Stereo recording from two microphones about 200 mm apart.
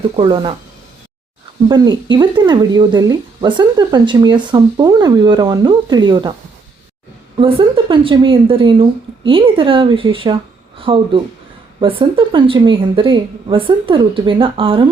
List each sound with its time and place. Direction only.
0.2 s speech: 25° right (ahead or behind)
1.6 s speech: 20° right (ahead or behind)
7.3 s speech: 25° right (ahead or behind)